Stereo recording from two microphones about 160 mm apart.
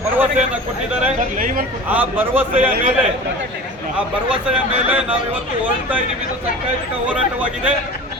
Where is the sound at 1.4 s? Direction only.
55° right (ahead or behind).